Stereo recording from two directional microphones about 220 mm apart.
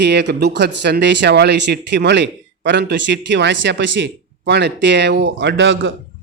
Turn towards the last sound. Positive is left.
turn(degrees=-60)  # may be behind; listen again after turning